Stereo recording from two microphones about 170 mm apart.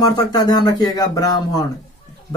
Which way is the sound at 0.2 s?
25° left (ahead or behind).